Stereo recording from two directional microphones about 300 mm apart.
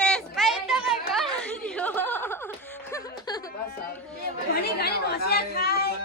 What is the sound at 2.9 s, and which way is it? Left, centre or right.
Music, centre.